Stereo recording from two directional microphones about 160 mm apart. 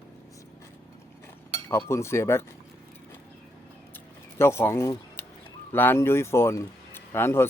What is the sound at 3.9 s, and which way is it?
Scissors, 15° left (ahead or behind).